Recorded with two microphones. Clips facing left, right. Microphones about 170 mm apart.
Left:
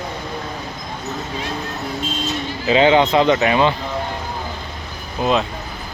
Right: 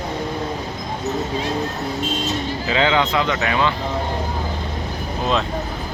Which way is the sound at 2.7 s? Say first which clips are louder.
Left 6 dB; 20° left (ahead or behind).